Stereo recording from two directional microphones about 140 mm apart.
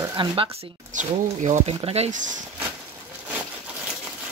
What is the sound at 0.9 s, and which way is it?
Speech, 60° right (ahead or behind).